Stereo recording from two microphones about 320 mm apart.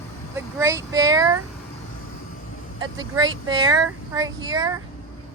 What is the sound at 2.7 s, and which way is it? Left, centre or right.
Speech, right.